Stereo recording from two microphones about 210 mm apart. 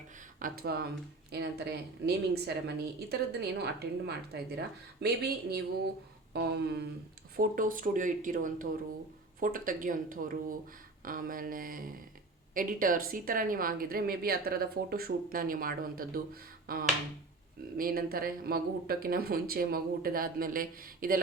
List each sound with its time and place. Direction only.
0.3 s a woman's voice: 45° right (ahead or behind)